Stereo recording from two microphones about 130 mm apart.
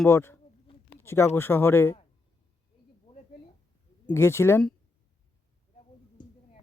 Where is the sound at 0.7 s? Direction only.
45° left (ahead or behind).